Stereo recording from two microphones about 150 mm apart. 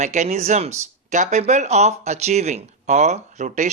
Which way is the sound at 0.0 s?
50° right (ahead or behind).